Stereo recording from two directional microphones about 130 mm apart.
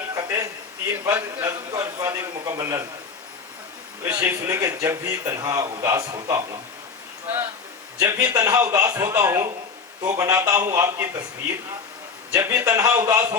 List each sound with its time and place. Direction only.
0.1 s a sound: 25° right (ahead or behind)
1.0 s a man's voice: 20° right (ahead or behind)
4.0 s a man's voice: 20° right (ahead or behind)
7.9 s a man's voice: 25° right (ahead or behind)
12.3 s a man's voice: 25° right (ahead or behind)